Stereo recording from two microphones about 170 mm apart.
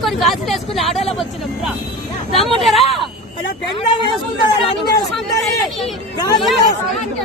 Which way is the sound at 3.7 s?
30° left (ahead or behind).